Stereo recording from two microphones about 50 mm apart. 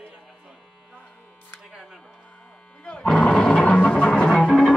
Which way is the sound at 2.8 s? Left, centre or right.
Centre.